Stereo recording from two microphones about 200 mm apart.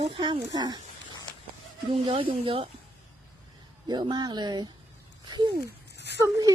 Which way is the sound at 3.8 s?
20° right (ahead or behind).